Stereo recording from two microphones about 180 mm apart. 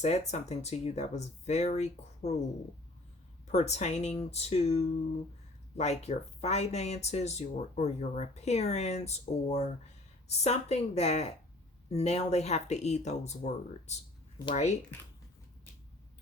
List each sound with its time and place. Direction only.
0.0 s speech: 40° left (ahead or behind)
3.5 s speech: 40° left (ahead or behind)